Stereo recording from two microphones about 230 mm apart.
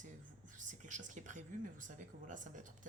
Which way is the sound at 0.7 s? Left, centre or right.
Right.